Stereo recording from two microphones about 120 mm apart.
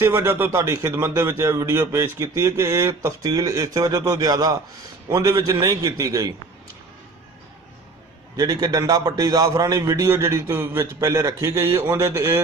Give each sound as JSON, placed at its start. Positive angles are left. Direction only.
{"t": 0.0, "sound": "a man's voice", "side_deg": -20}
{"t": 8.4, "sound": "a man's voice", "side_deg": -30}